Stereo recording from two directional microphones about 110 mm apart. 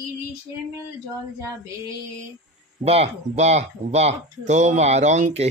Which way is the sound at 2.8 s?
65° right (ahead or behind).